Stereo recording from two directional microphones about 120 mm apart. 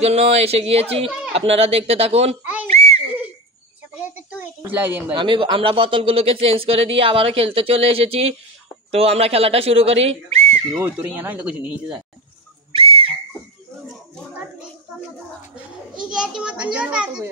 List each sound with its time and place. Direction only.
0.0 s speech: 60° right (ahead or behind)
2.7 s a sound: 60° right (ahead or behind)
4.0 s a sound: 15° right (ahead or behind)
4.6 s a woman's voice: 15° right (ahead or behind)
5.1 s speech: 45° right (ahead or behind)
10.8 s a child's voice: 15° right (ahead or behind)
12.7 s whistle: 50° right (ahead or behind)
16.0 s a child's voice: 5° right (ahead or behind)